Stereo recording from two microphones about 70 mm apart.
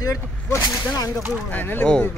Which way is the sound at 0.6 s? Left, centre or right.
Left.